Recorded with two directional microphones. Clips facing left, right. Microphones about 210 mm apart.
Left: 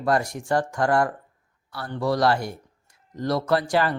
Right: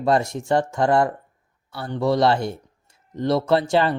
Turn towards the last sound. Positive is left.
turn(degrees=-25)  # may be behind; listen again after turning